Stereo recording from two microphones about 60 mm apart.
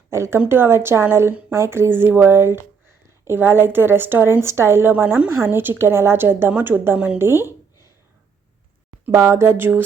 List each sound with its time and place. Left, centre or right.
0.1 s a woman's voice: right
0.3 s a woman's voice: right
9.1 s speech: right